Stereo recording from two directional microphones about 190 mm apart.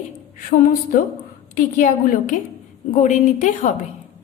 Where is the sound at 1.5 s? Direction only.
45° left (ahead or behind).